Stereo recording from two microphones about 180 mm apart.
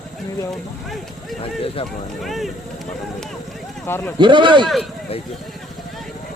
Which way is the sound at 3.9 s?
15° left (ahead or behind).